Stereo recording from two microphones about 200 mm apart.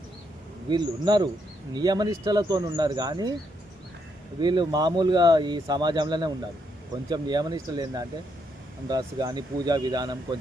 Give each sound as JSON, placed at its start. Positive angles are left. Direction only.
{"t": 0.7, "sound": "speech", "side_deg": -20}
{"t": 4.4, "sound": "speech", "side_deg": -20}